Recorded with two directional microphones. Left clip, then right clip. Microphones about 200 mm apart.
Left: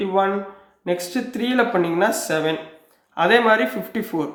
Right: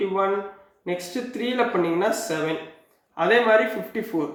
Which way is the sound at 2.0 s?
50° left (ahead or behind).